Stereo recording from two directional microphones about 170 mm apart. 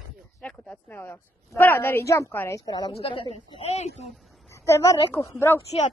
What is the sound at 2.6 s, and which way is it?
A woman's voice, 25° left (ahead or behind).